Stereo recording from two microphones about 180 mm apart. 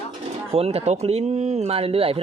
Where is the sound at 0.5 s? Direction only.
35° right (ahead or behind).